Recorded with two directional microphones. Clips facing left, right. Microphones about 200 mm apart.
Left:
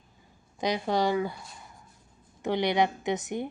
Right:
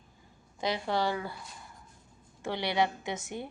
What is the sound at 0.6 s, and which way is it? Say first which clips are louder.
Speech: left 4 dB; 15° left (ahead or behind).